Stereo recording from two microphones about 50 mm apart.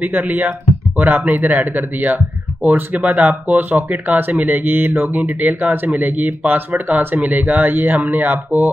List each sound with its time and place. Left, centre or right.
0.0 s speech: right